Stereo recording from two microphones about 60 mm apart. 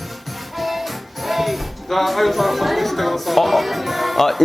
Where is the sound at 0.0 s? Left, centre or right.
Centre.